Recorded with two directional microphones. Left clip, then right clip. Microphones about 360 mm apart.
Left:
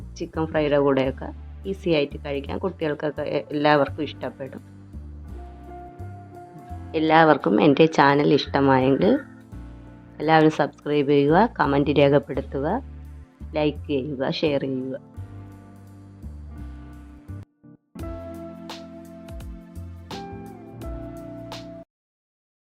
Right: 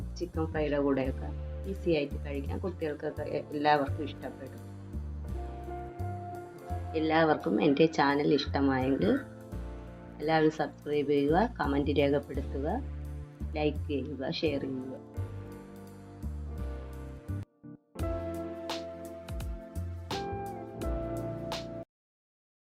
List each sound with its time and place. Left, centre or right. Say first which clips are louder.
0.2 s speech: left 9 dB; left
6.9 s speech: left 10 dB; left
10.2 s speech: left 9 dB; left
18.6 s music: right 1 dB; centre